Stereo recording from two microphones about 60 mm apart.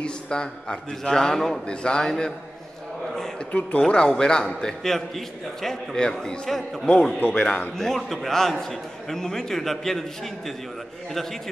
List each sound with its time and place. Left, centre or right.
0.0 s a man's voice: centre
3.5 s a man's voice: centre
7.2 s a man's voice: centre
7.7 s a man's voice: centre